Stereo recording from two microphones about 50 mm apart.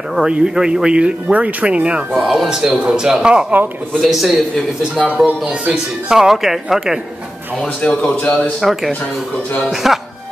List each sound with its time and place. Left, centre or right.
0.3 s speech: centre
2.1 s speech: centre
4.0 s a man's voice: centre
5.2 s speech: right; by 7.0 s centre
7.6 s speech: left
8.5 s a man's voice: centre